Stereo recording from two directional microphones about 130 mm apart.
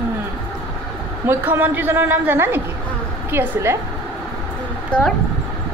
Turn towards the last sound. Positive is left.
turn(degrees=10)  # may be behind; listen again after turning